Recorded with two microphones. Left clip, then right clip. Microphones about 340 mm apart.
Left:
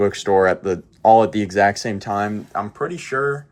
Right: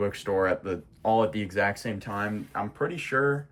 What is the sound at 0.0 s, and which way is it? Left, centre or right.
Speech, centre.